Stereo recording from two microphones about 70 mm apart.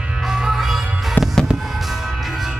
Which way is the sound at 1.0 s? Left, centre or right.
Centre.